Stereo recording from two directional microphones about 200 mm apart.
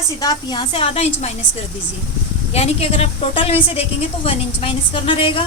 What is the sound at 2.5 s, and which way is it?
A woman's voice, 30° left (ahead or behind).